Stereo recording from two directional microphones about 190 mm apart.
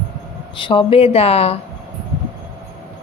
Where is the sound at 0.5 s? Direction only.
25° left (ahead or behind).